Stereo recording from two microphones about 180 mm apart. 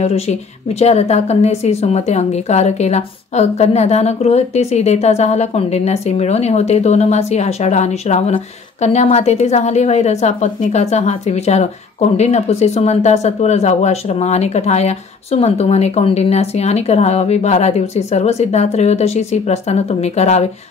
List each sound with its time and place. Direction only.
0.0 s a woman's voice: 35° left (ahead or behind)